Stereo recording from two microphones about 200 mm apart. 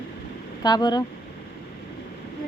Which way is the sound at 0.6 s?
20° left (ahead or behind).